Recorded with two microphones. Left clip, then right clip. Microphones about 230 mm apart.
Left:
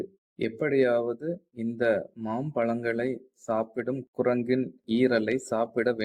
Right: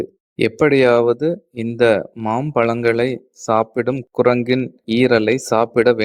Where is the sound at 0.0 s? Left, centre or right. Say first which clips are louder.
Right 13 dB; right.